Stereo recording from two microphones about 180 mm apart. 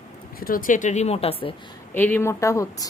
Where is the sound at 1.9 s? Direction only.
10° left (ahead or behind).